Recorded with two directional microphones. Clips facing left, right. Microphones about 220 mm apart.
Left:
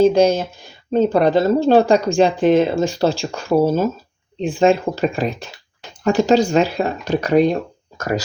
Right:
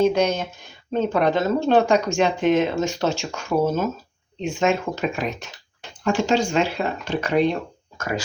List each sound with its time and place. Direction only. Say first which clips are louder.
0.0 s speech: left 6 dB; 30° left (ahead or behind)